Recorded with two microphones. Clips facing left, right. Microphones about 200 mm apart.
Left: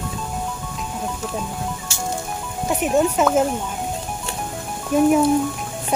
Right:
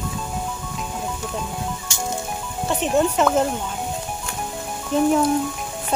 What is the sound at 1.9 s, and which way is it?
Music, 15° right (ahead or behind).